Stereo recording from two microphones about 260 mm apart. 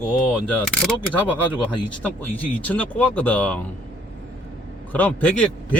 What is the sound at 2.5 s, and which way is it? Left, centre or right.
Speech, centre.